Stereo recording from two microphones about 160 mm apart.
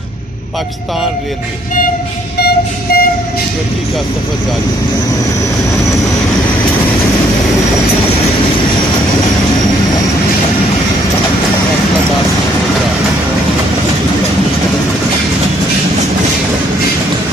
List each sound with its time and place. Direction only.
2.4 s vehicle: 75° left (ahead or behind)